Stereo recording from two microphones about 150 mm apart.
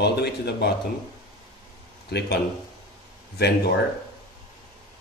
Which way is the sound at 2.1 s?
90° left.